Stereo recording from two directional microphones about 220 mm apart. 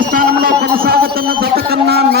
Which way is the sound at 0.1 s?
40° right (ahead or behind).